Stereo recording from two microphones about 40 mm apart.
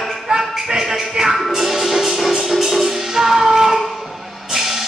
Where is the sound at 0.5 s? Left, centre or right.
Centre.